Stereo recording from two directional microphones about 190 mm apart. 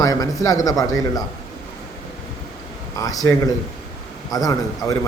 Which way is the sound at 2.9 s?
20° left (ahead or behind).